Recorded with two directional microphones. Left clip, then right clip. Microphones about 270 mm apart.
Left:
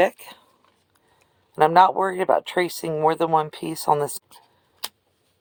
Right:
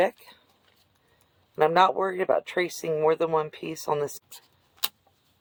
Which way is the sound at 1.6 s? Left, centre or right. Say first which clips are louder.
Left 5 dB; left.